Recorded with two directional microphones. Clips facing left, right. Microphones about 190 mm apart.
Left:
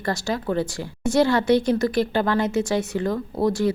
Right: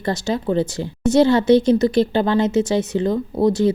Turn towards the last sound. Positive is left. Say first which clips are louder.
# right 5 dB
turn(degrees=-20)  # may be behind; listen again after turning